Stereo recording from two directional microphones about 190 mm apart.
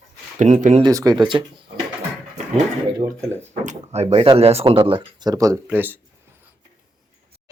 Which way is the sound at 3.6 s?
35° right (ahead or behind).